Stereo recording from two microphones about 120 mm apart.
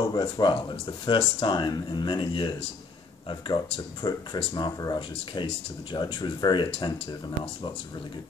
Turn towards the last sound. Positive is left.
turn(degrees=45)  # may be behind; listen again after turning